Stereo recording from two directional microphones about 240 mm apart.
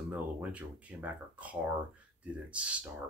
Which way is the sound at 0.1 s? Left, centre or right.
Centre.